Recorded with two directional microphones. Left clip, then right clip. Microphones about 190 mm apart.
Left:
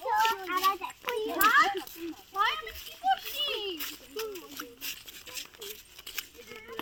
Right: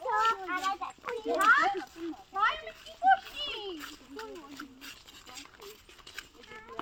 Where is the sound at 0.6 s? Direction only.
35° left (ahead or behind).